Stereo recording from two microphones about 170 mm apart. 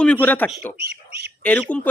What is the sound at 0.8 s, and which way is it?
Speech, 70° right (ahead or behind).